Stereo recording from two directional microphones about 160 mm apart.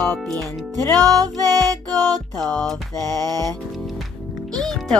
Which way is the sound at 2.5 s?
5° left (ahead or behind).